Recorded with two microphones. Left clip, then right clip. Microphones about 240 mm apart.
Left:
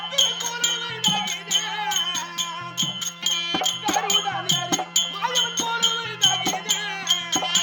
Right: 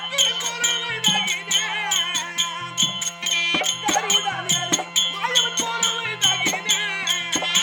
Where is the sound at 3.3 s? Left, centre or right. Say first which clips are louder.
Right 5 dB; centre.